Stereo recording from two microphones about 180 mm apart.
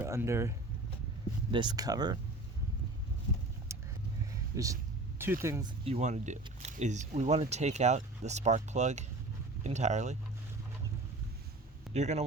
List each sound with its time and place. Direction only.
0.0 s speech: 15° right (ahead or behind)
1.5 s speech: 25° right (ahead or behind)
3.7 s vehicle: 15° right (ahead or behind)
4.5 s speech: 20° right (ahead or behind)
5.8 s speech: 40° right (ahead or behind)
11.9 s speech: 40° right (ahead or behind)